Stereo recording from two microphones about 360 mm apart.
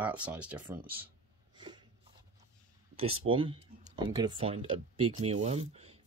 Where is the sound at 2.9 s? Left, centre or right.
Centre.